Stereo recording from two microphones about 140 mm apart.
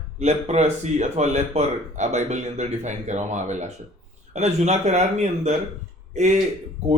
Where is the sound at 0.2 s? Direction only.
50° right (ahead or behind).